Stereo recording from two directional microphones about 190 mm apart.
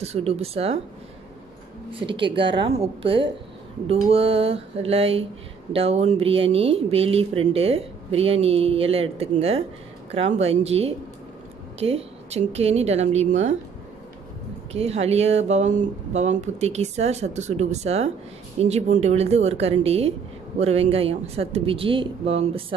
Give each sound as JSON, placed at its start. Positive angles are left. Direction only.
{"t": 0.0, "sound": "speech", "side_deg": -35}
{"t": 1.9, "sound": "a woman's voice", "side_deg": -25}
{"t": 14.7, "sound": "speech", "side_deg": -35}